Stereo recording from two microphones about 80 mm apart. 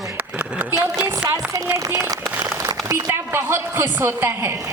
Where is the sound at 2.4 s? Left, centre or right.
Right.